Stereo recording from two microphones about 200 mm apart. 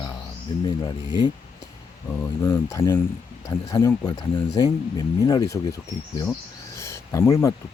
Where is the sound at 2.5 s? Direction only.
15° left (ahead or behind).